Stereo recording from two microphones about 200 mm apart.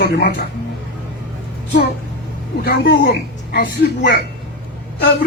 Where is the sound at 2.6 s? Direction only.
50° left (ahead or behind).